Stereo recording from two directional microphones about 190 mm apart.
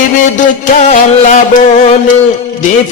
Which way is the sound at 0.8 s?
40° left (ahead or behind).